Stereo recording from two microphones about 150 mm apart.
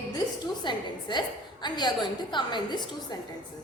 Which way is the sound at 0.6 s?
30° left (ahead or behind).